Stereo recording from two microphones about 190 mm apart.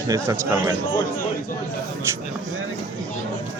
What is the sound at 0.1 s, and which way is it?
Speech, 15° right (ahead or behind).